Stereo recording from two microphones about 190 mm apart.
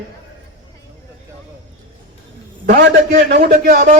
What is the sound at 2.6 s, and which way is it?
A man's voice, 50° right (ahead or behind).